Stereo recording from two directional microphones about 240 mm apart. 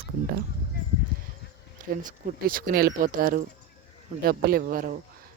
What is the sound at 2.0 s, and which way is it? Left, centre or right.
Speech, right.